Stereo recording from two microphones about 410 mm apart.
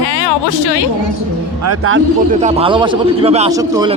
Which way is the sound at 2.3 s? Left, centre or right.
Centre.